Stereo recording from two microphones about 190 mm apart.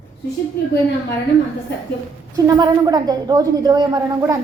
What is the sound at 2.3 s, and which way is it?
A woman's voice, 20° right (ahead or behind).